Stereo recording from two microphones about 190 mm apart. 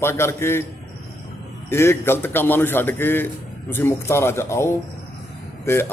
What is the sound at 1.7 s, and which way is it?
A man's voice, 15° left (ahead or behind).